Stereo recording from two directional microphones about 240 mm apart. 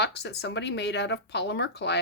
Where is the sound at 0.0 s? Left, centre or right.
Left.